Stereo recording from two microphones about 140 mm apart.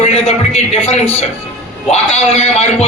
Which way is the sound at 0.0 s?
45° left (ahead or behind).